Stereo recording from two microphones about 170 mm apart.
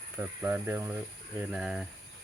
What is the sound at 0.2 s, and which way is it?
Speech, 10° right (ahead or behind).